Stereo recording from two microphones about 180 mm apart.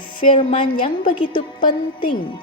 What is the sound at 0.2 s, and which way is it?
A woman's voice, 30° left (ahead or behind).